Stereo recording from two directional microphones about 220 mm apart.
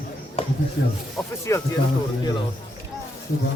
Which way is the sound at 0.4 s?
25° left (ahead or behind).